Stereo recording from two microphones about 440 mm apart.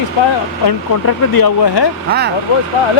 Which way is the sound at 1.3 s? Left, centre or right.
Left.